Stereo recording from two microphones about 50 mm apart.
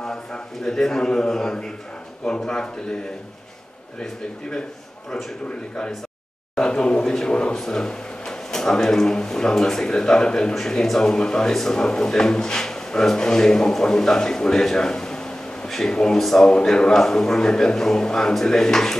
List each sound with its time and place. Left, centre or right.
0.0 s a man's voice: centre
4.0 s a man's voice: centre
6.5 s a man's voice: centre
16.4 s a man's voice: centre